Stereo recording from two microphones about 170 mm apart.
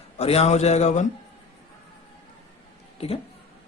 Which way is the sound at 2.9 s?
35° left (ahead or behind).